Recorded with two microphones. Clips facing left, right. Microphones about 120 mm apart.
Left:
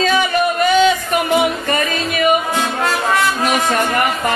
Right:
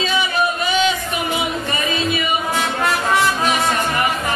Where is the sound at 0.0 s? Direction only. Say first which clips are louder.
Left 4 dB; 45° left (ahead or behind).